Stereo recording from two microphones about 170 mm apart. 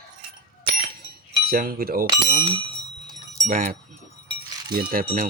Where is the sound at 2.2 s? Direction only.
40° right (ahead or behind).